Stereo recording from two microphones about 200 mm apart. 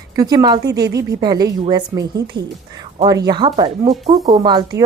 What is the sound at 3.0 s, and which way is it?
A woman's voice, 20° right (ahead or behind).